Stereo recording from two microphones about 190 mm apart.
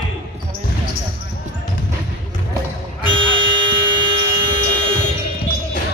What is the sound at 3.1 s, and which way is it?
Music, 25° right (ahead or behind).